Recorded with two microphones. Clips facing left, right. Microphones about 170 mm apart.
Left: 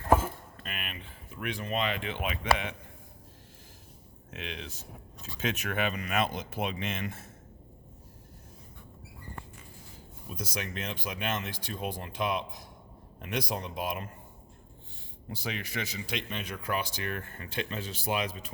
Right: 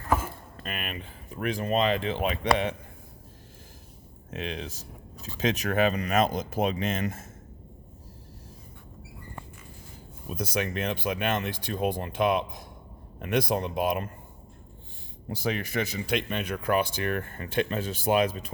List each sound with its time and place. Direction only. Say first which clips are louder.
0.6 s speech: right 6 dB; 45° right (ahead or behind)
4.3 s speech: right 6 dB; 40° right (ahead or behind)
10.2 s speech: right 8 dB; 55° right (ahead or behind)
15.3 s speech: right 7 dB; 45° right (ahead or behind)